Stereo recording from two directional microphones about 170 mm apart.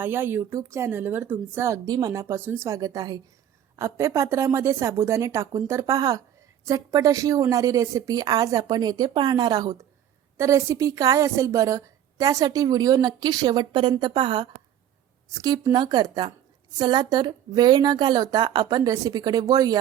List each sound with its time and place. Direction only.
0.0 s a woman's voice: 15° right (ahead or behind)